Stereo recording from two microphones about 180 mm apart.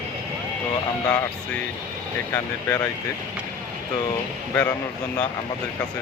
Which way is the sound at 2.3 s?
10° left (ahead or behind).